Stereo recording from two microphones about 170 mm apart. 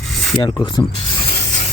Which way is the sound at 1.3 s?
40° left (ahead or behind).